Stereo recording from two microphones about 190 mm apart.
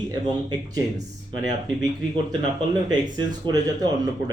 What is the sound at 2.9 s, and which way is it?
Speech, 20° right (ahead or behind).